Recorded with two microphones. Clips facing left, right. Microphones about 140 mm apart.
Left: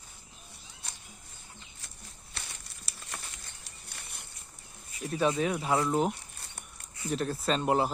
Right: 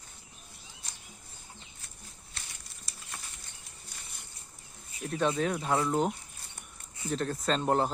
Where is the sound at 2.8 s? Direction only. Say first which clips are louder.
Left 2 dB; 75° left (ahead or behind).